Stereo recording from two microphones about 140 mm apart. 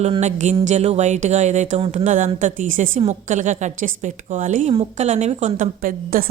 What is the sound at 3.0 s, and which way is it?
A woman's voice, 55° right (ahead or behind).